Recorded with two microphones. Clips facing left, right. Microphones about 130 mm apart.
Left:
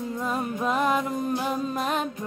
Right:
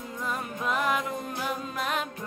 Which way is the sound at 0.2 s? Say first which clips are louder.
Left 4 dB; 30° left (ahead or behind).